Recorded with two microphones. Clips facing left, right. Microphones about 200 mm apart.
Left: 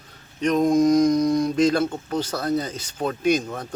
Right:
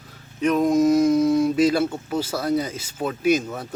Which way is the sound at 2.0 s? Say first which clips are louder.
Right 1 dB; 10° right (ahead or behind).